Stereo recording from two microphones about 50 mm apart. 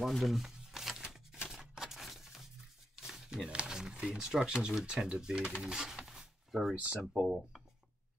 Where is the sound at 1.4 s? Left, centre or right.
Centre.